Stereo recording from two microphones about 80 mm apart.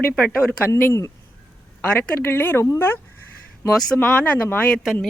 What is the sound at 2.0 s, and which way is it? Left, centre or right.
A woman's voice, left.